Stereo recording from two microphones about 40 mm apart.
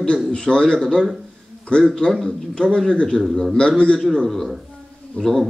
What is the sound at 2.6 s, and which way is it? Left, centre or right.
Speech, centre.